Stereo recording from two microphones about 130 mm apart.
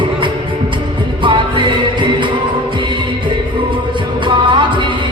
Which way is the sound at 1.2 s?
40° right (ahead or behind).